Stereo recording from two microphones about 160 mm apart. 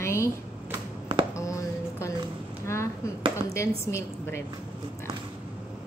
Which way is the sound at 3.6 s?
15° left (ahead or behind).